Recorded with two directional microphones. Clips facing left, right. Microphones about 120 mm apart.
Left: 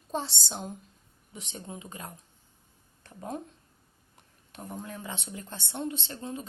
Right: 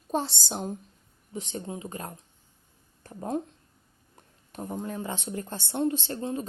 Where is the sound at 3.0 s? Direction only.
35° right (ahead or behind).